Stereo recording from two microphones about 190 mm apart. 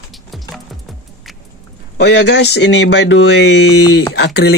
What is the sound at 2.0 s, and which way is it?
Speech, 60° left (ahead or behind).